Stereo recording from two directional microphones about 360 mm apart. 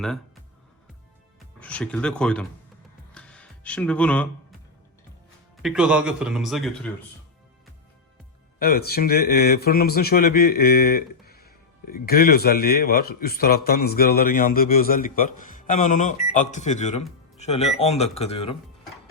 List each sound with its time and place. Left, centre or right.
1.5 s speech: centre
3.2 s music: centre
5.6 s speech: centre
8.5 s speech: left